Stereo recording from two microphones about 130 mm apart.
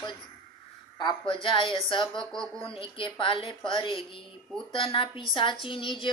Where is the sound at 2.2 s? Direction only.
5° left (ahead or behind).